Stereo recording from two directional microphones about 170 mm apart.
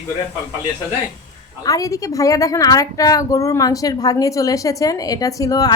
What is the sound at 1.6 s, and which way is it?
A woman's voice, 20° left (ahead or behind).